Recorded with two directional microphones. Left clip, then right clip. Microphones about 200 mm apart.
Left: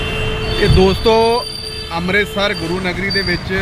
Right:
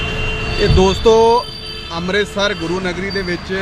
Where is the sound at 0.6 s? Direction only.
Centre (ahead or behind).